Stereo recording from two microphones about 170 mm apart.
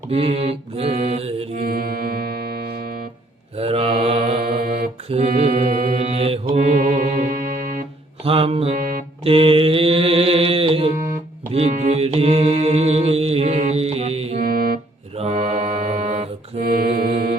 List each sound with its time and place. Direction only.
0.1 s mantra: 35° right (ahead or behind)
1.6 s music: 60° right (ahead or behind)
3.6 s mantra: 35° right (ahead or behind)
4.6 s mantra: 55° right (ahead or behind)
5.0 s mantra: 40° right (ahead or behind)
8.2 s mantra: 35° right (ahead or behind)
11.5 s music: 40° right (ahead or behind)
14.4 s music: 60° right (ahead or behind)
15.2 s mantra: 40° right (ahead or behind)
16.6 s mantra: 65° right (ahead or behind)